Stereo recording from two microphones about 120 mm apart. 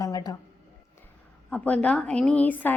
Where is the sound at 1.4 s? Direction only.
10° left (ahead or behind).